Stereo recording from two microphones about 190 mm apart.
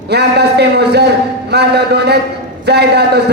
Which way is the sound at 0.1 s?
60° right (ahead or behind).